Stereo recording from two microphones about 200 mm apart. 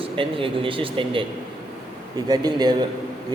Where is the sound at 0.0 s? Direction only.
25° right (ahead or behind).